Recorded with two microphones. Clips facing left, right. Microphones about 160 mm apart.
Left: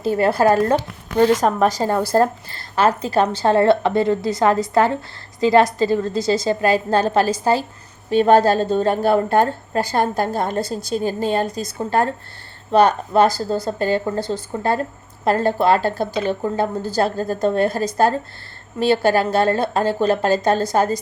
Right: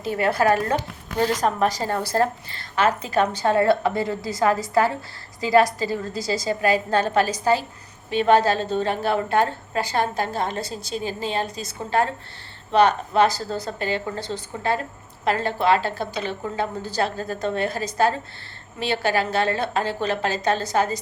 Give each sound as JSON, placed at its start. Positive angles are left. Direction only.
{"t": 0.0, "sound": "a woman's voice", "side_deg": 30}
{"t": 14.2, "sound": "speech", "side_deg": 5}
{"t": 14.6, "sound": "a woman's voice", "side_deg": 45}